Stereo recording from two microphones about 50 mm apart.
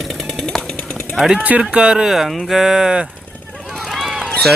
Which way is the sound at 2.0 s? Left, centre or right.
Centre.